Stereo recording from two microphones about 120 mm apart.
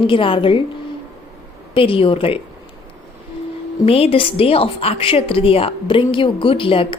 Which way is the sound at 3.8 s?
50° left (ahead or behind).